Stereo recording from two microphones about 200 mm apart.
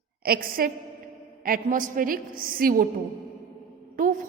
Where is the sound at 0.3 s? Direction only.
45° right (ahead or behind).